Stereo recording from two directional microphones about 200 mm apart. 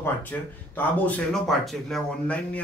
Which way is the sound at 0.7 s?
5° left (ahead or behind).